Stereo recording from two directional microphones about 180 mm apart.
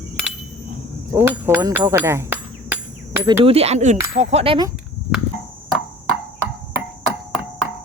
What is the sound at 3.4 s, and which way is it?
Speech, 35° right (ahead or behind).